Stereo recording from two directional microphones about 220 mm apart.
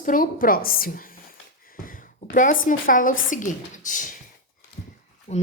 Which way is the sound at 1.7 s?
40° left (ahead or behind).